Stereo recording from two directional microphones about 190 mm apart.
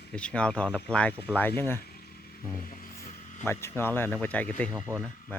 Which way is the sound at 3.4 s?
15° left (ahead or behind).